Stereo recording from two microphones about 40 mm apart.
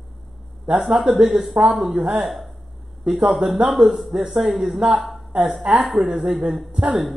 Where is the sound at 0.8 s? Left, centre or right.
Centre.